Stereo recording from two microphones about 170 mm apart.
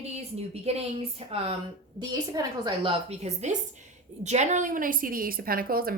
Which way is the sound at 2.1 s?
25° right (ahead or behind).